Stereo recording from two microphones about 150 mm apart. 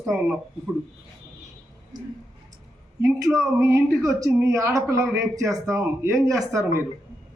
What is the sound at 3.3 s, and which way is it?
Speech, centre (ahead or behind).